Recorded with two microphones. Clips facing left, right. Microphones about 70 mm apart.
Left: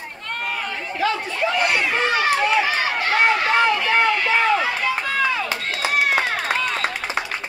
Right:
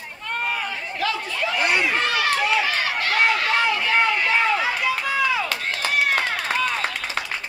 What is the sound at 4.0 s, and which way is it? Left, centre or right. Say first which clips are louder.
Run: left 2 dB; centre.